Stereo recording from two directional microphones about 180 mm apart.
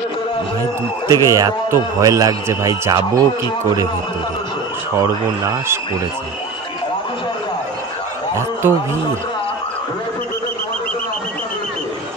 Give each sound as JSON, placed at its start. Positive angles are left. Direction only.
{"t": 1.0, "sound": "a man's voice", "side_deg": -20}
{"t": 5.0, "sound": "speech", "side_deg": -15}